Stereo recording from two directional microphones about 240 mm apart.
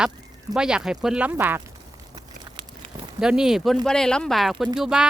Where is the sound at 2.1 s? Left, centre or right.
Centre.